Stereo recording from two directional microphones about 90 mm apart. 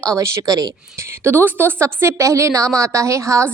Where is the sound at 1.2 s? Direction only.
25° right (ahead or behind).